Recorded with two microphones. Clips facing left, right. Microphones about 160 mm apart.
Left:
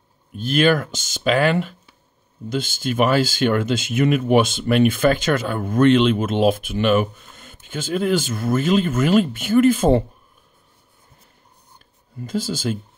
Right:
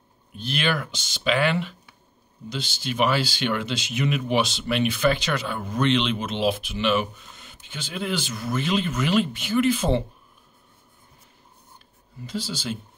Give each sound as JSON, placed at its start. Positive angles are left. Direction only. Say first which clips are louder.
{"t": 0.4, "sound": "speech", "louder": "left 9 dB", "side_deg": 45}
{"t": 12.2, "sound": "speech", "louder": "left 7 dB", "side_deg": 45}